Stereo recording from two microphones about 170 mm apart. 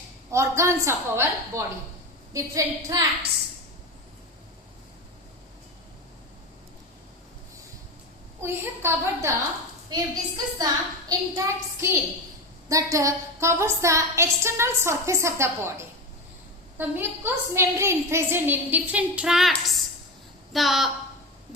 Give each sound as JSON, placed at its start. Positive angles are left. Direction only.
{"t": 0.3, "sound": "a woman's voice", "side_deg": -15}
{"t": 8.4, "sound": "a woman's voice", "side_deg": -15}